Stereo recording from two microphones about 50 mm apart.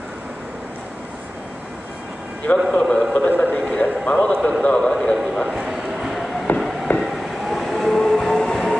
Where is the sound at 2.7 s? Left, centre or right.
Centre.